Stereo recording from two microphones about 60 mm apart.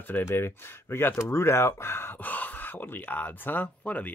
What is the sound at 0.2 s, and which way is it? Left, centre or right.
Speech, left.